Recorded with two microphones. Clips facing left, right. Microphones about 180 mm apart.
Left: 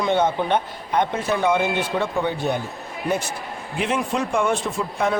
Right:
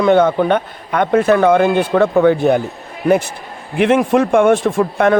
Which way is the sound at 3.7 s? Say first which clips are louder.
Right 11 dB; 60° right (ahead or behind).